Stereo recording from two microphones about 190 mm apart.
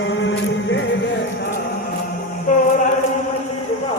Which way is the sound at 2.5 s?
40° left (ahead or behind).